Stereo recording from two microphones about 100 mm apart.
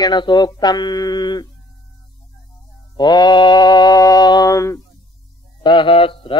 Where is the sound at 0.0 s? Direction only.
50° left (ahead or behind).